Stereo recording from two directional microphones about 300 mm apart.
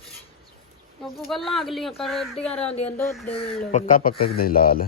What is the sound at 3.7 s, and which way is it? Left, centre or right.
A man's voice, left.